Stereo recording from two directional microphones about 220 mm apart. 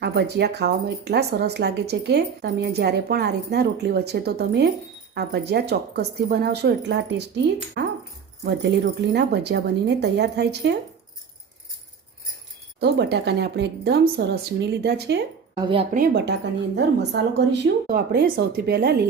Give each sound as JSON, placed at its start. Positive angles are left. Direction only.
{"t": 0.0, "sound": "speech", "side_deg": -50}
{"t": 7.8, "sound": "dog", "side_deg": -50}
{"t": 8.4, "sound": "speech", "side_deg": -50}
{"t": 12.8, "sound": "speech", "side_deg": -50}